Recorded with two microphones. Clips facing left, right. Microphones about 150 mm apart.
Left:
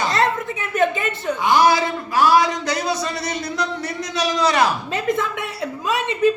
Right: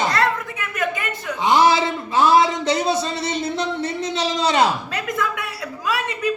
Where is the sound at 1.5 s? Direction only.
25° right (ahead or behind).